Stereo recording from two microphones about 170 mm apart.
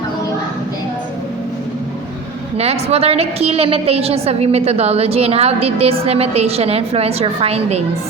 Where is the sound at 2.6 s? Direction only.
40° right (ahead or behind).